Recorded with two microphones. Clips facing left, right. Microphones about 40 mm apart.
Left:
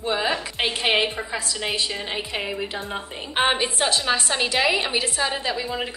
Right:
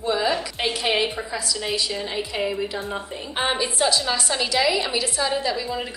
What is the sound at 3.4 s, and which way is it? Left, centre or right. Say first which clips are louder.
A woman's voice: left 1 dB; left.